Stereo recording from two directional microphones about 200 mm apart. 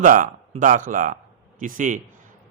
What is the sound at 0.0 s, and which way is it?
A man's voice, 40° right (ahead or behind).